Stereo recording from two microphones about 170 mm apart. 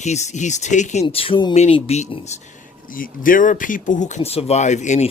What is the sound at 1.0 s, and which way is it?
Speech, 35° left (ahead or behind).